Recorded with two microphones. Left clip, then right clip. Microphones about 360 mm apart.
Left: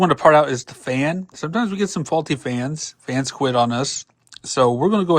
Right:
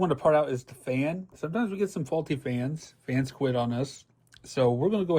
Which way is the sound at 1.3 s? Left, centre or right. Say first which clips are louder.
Left 8 dB; left.